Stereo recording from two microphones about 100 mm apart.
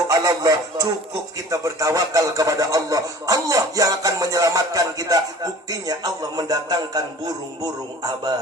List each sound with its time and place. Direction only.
0.1 s speech: 40° right (ahead or behind)